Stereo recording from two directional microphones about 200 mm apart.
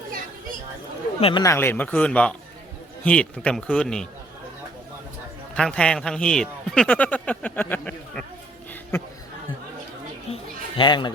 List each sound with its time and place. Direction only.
1.2 s a man's voice: 20° left (ahead or behind); by 4.0 s 5° left (ahead or behind)
5.5 s a man's voice: 5° left (ahead or behind)
10.3 s children playing: 25° left (ahead or behind)